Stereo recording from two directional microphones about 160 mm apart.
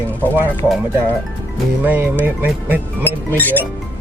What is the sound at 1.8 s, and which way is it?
Speech, 10° right (ahead or behind).